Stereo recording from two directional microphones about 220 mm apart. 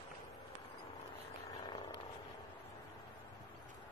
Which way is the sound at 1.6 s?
20° left (ahead or behind).